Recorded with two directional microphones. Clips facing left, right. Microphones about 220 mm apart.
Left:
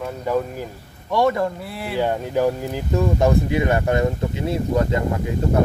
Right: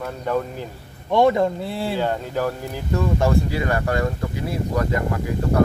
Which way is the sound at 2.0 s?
15° left (ahead or behind).